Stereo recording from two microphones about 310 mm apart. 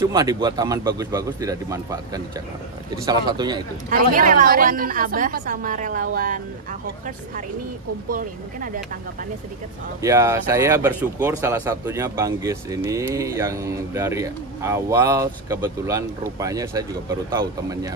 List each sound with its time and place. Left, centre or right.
0.0 s speech: centre
3.9 s a woman's voice: right
8.1 s a woman's voice: right
10.0 s speech: centre